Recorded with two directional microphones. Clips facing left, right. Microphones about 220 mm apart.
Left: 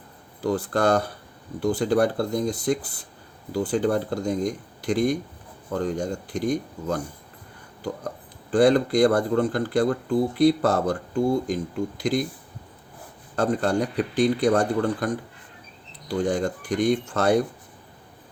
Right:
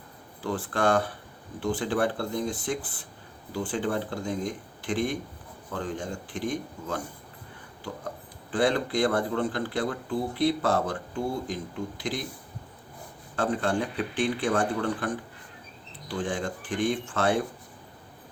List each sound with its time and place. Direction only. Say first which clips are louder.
0.4 s speech: left 4 dB; 40° left (ahead or behind)
8.0 s speech: left 4 dB; 40° left (ahead or behind)
13.3 s speech: left 4 dB; 40° left (ahead or behind)